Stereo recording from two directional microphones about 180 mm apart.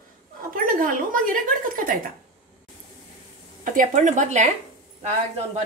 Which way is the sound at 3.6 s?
45° right (ahead or behind).